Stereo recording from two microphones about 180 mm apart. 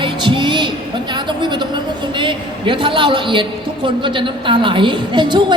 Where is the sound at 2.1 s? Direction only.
25° right (ahead or behind).